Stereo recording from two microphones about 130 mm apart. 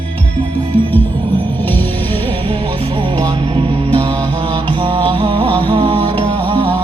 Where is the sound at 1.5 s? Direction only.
15° left (ahead or behind).